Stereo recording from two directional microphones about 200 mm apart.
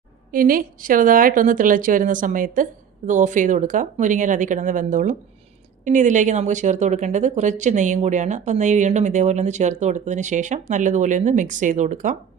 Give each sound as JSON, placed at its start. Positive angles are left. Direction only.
{"t": 0.3, "sound": "a woman's voice", "side_deg": -45}